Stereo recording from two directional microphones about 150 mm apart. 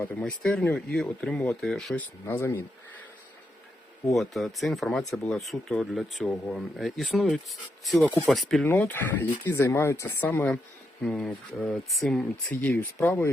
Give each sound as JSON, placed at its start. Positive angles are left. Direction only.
{"t": 0.0, "sound": "speech", "side_deg": 10}
{"t": 2.2, "sound": "speech", "side_deg": 15}
{"t": 4.1, "sound": "speech", "side_deg": 0}
{"t": 8.7, "sound": "speech", "side_deg": 15}